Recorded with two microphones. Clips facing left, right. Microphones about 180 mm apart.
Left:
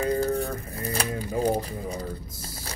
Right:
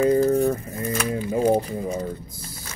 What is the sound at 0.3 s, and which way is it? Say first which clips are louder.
Pigeon: right 8 dB; 35° right (ahead or behind).